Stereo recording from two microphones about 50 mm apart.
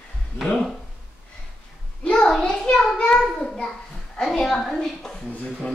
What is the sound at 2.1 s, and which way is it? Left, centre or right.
Child singing, centre.